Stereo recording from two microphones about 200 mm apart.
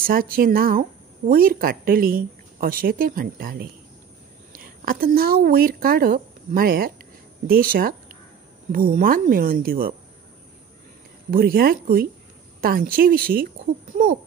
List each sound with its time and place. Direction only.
0.0 s speech: 45° right (ahead or behind)
11.2 s speech: 50° right (ahead or behind)